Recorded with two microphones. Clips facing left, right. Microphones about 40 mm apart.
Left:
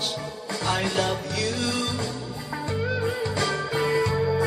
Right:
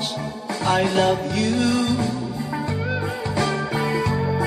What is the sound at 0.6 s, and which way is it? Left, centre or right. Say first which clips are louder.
Music: right 7 dB; centre.